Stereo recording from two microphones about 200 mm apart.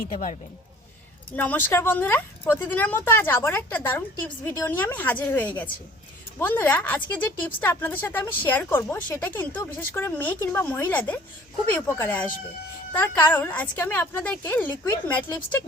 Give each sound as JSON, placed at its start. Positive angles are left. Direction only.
{"t": 0.1, "sound": "a man's voice", "side_deg": 40}
{"t": 1.4, "sound": "a woman's voice", "side_deg": 10}